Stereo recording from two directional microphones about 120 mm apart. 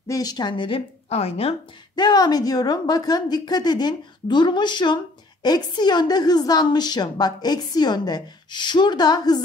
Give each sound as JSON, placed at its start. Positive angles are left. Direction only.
{"t": 0.1, "sound": "a woman's voice", "side_deg": 30}
{"t": 2.0, "sound": "a woman's voice", "side_deg": 35}